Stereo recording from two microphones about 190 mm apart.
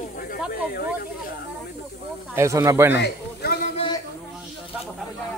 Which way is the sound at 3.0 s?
60° left (ahead or behind).